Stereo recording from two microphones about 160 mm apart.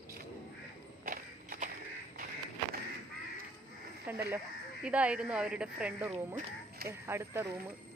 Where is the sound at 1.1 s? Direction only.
60° right (ahead or behind).